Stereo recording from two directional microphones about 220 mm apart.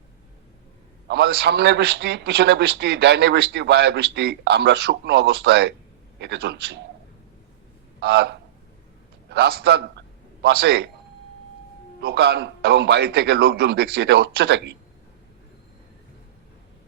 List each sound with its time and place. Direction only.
1.0 s a man's voice: 50° right (ahead or behind)
8.0 s a man's voice: 50° right (ahead or behind)
11.9 s a man's voice: 50° right (ahead or behind)